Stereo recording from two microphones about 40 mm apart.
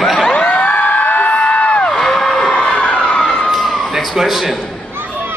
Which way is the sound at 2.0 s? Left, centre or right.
Centre.